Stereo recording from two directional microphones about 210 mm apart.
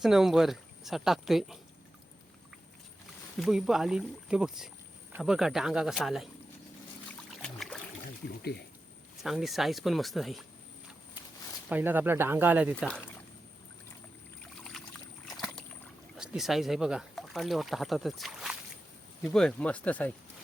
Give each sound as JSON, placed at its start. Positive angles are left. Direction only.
{"t": 0.0, "sound": "speech", "side_deg": 0}
{"t": 3.4, "sound": "speech", "side_deg": 0}
{"t": 7.4, "sound": "a sound", "side_deg": 0}
{"t": 8.4, "sound": "speech", "side_deg": 50}
{"t": 9.2, "sound": "speech", "side_deg": 0}
{"t": 11.7, "sound": "speech", "side_deg": -10}
{"t": 12.8, "sound": "speech", "side_deg": 5}
{"t": 15.3, "sound": "rowboat", "side_deg": 0}
{"t": 16.1, "sound": "speech", "side_deg": -5}